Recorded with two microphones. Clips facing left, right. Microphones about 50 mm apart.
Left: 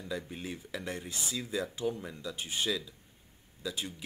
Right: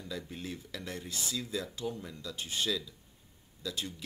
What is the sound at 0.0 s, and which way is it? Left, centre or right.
Speech, centre.